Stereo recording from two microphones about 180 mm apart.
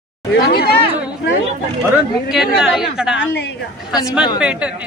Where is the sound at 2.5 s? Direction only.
5° right (ahead or behind).